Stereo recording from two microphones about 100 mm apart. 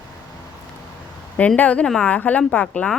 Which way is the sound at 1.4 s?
15° left (ahead or behind).